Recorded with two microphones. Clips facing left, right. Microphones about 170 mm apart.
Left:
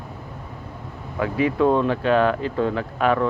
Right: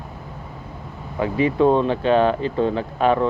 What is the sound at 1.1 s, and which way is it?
Speech, 25° right (ahead or behind).